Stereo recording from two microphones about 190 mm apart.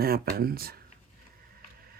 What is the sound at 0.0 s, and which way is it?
Speech, 55° right (ahead or behind).